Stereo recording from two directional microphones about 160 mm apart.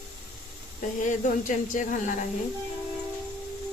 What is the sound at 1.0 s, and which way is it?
Speech, 50° left (ahead or behind).